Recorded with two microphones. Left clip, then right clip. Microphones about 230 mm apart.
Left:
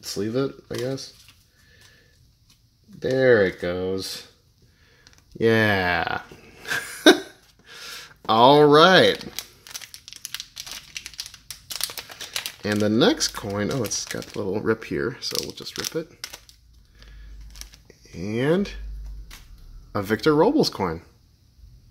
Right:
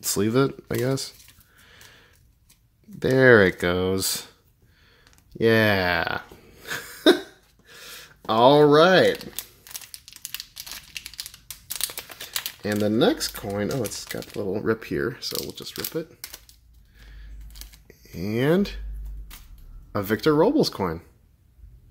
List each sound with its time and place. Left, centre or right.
0.0 s speech: right
3.0 s speech: right
5.0 s a sound: centre
17.5 s tearing: centre
17.8 s speech: centre
19.9 s speech: centre